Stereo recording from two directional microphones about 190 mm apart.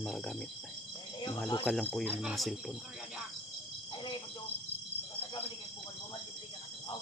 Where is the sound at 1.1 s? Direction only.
20° left (ahead or behind).